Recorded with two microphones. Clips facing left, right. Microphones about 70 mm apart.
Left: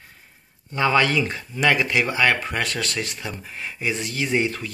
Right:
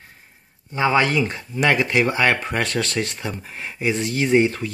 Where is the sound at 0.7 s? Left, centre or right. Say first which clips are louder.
Right 1 dB; right.